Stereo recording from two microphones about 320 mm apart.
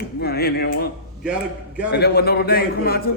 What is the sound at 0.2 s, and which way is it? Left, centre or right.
Speech, left.